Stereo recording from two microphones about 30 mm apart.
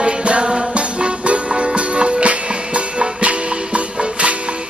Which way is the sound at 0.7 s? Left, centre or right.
Right.